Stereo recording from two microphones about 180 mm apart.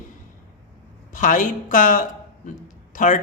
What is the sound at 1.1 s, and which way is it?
A man's voice, 45° left (ahead or behind).